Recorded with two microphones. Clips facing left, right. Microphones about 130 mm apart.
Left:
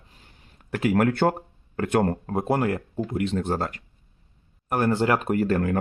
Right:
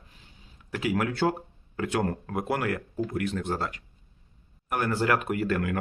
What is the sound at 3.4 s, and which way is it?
Speech, 45° left (ahead or behind).